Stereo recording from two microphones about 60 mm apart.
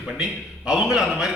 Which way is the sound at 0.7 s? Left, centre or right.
Centre.